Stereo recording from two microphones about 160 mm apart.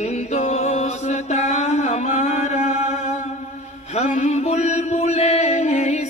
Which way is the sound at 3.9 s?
45° left (ahead or behind).